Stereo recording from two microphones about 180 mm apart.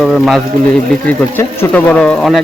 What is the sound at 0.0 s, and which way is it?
Speech, centre (ahead or behind).